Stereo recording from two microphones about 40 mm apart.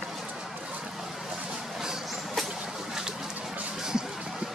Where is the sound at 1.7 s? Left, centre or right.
Centre.